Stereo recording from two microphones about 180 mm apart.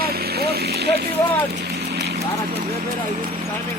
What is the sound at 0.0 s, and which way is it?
Vehicle, 60° right (ahead or behind).